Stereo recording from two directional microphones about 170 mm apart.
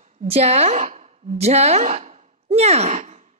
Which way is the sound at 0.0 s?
40° right (ahead or behind).